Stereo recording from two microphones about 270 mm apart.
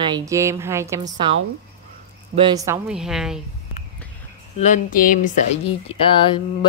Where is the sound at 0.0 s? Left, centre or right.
Centre.